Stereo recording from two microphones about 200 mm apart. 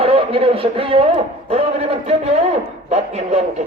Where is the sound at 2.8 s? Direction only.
35° right (ahead or behind).